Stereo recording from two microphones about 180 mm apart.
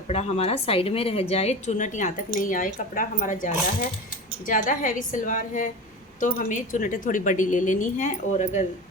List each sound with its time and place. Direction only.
0.1 s a woman's voice: 35° left (ahead or behind)